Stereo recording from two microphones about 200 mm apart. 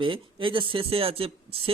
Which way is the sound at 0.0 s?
25° right (ahead or behind).